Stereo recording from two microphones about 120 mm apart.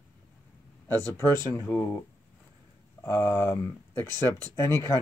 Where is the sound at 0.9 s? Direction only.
15° left (ahead or behind).